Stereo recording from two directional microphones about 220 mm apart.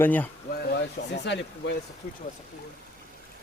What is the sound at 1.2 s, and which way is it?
Speech, 55° left (ahead or behind).